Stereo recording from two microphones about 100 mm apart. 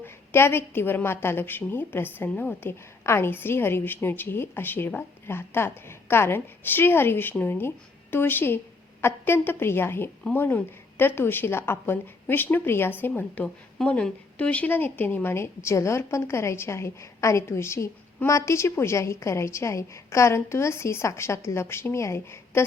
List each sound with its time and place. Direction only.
0.0 s a woman's voice: 25° left (ahead or behind)